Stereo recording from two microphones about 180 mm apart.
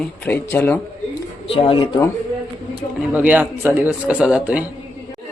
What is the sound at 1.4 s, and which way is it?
Speech, 30° left (ahead or behind).